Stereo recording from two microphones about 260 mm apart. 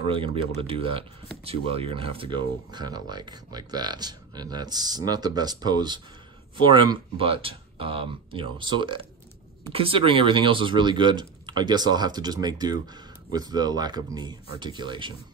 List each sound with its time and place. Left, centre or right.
0.0 s speech: right